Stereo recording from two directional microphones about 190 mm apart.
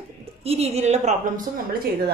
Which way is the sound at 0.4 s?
30° right (ahead or behind).